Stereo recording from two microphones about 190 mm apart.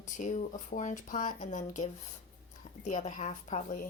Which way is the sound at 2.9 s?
40° left (ahead or behind).